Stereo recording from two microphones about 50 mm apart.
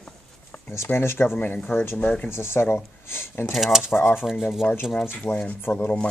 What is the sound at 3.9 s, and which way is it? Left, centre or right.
Speech, left.